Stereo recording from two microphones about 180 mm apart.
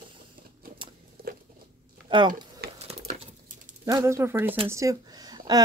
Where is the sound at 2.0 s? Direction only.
25° right (ahead or behind).